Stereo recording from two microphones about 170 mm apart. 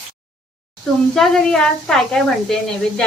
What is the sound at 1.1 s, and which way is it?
Speech, 5° left (ahead or behind).